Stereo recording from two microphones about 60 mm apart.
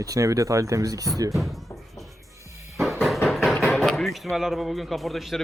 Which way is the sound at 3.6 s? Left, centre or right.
Centre.